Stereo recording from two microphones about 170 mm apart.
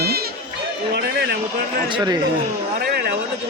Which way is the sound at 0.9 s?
70° right (ahead or behind).